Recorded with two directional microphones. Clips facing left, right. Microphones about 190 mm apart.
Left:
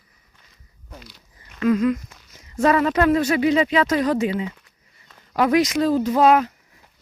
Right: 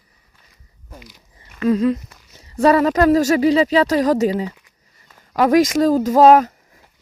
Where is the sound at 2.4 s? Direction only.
35° right (ahead or behind).